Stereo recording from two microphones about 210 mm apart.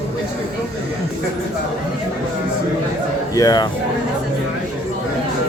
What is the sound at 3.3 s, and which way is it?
Speech, 15° left (ahead or behind).